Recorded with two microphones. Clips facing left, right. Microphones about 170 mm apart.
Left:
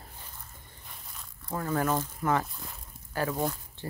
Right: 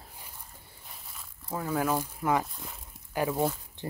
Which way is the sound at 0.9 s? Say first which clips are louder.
Even; centre (ahead or behind).